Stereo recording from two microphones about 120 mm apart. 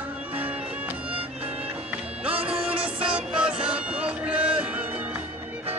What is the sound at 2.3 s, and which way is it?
Music, 50° right (ahead or behind).